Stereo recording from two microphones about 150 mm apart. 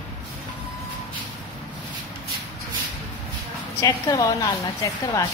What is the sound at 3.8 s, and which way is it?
A woman's voice, 25° left (ahead or behind).